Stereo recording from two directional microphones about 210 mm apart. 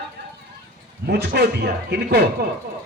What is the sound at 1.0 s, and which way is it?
A man's voice, 50° right (ahead or behind).